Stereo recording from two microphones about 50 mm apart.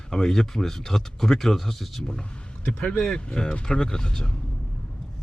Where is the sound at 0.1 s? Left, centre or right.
Centre.